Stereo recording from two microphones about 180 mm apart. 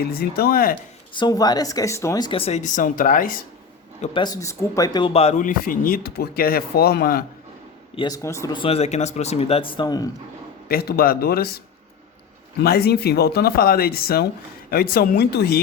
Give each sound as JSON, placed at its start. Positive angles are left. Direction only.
{"t": 0.0, "sound": "speech", "side_deg": 55}
{"t": 1.1, "sound": "a woman's voice", "side_deg": 25}
{"t": 4.0, "sound": "a man's voice", "side_deg": 25}
{"t": 7.9, "sound": "a woman's voice", "side_deg": 20}
{"t": 8.6, "sound": "speech", "side_deg": 35}
{"t": 10.7, "sound": "speech", "side_deg": 55}
{"t": 12.6, "sound": "speech", "side_deg": 60}